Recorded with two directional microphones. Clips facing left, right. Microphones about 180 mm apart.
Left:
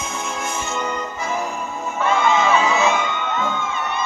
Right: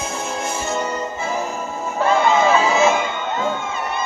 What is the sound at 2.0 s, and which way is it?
Crowd, 35° right (ahead or behind).